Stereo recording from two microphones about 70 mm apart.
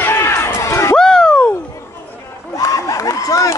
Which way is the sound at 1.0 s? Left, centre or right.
Centre.